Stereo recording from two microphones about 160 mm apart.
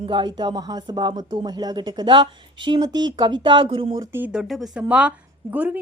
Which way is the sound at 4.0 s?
10° right (ahead or behind).